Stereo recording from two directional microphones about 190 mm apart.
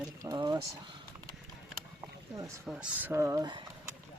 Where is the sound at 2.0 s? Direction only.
15° right (ahead or behind).